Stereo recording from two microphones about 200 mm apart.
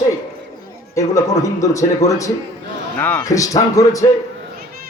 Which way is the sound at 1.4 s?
15° left (ahead or behind).